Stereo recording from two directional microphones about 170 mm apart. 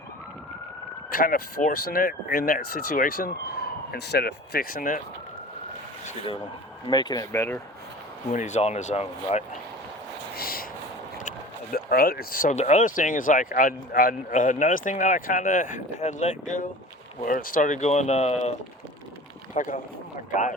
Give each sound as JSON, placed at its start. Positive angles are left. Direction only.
{"t": 1.1, "sound": "speech", "side_deg": 55}
{"t": 6.8, "sound": "speech", "side_deg": 25}
{"t": 8.3, "sound": "speech", "side_deg": 45}
{"t": 10.3, "sound": "a sound", "side_deg": 60}
{"t": 11.2, "sound": "speech", "side_deg": 50}
{"t": 17.2, "sound": "speech", "side_deg": 55}
{"t": 19.5, "sound": "speech", "side_deg": 50}